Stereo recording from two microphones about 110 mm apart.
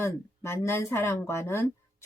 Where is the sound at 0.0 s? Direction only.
25° left (ahead or behind).